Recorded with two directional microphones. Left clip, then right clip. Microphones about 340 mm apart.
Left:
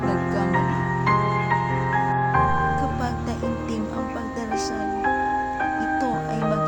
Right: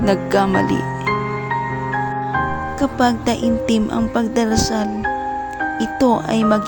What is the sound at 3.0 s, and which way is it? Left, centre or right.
Speech, right.